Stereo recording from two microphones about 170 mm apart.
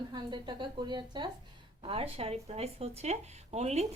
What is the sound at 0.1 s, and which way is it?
A woman's voice, 25° right (ahead or behind).